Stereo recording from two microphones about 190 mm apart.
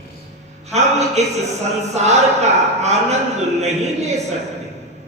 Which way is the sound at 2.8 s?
35° right (ahead or behind).